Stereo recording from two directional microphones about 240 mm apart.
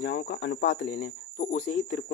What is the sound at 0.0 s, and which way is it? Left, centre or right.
Speech, left.